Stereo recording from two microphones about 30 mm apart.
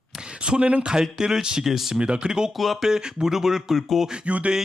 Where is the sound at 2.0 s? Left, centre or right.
Right.